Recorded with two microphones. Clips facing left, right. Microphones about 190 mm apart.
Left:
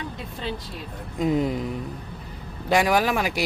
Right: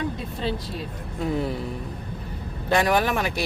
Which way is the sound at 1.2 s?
15° left (ahead or behind).